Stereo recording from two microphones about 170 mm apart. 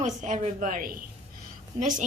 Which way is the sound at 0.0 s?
45° right (ahead or behind).